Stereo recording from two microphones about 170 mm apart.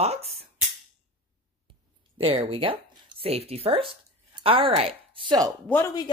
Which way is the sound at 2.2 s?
35° right (ahead or behind).